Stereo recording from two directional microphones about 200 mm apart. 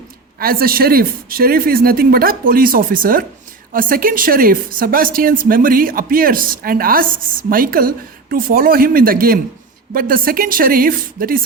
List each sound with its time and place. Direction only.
0.3 s speech: 45° right (ahead or behind)